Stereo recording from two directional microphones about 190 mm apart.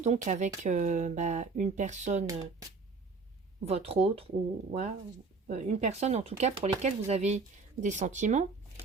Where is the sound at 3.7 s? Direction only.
30° right (ahead or behind).